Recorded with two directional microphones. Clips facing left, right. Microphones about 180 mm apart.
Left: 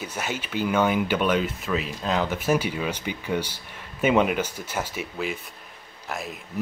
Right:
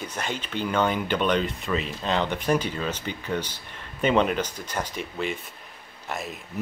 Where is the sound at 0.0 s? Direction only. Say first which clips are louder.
Left 1 dB; 5° left (ahead or behind).